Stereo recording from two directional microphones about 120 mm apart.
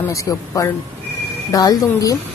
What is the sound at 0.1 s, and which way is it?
A man's voice, 25° left (ahead or behind).